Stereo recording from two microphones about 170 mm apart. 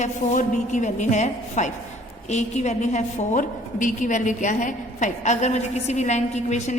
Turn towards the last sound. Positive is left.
turn(degrees=45)  # may be behind; listen again after turning